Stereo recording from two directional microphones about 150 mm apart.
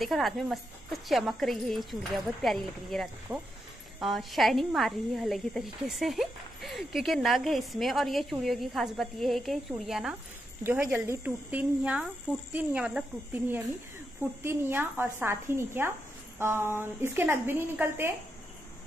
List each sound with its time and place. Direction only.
0.0 s speech: centre (ahead or behind)
3.3 s speech: 15° right (ahead or behind)
4.0 s speech: centre (ahead or behind); by 18.1 s 15° right (ahead or behind)